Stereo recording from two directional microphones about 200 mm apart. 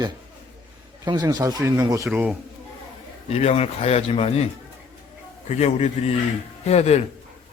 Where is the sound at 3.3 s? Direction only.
30° left (ahead or behind).